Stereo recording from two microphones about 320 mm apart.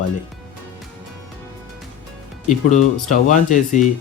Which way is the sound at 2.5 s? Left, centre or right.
Left.